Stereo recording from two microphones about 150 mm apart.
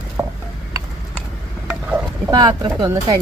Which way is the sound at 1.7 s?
10° right (ahead or behind).